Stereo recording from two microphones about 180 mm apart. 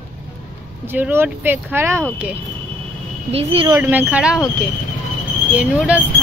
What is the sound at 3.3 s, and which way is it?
Speech, 35° right (ahead or behind).